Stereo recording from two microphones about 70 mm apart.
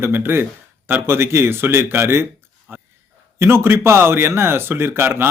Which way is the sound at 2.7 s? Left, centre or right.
Right.